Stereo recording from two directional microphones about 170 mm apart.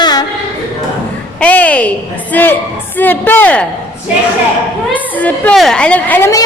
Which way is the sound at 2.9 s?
10° left (ahead or behind).